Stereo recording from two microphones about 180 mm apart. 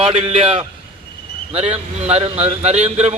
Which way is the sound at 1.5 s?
35° right (ahead or behind).